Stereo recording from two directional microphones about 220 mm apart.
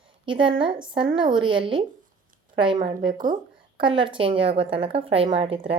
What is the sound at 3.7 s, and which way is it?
Speech, 25° right (ahead or behind).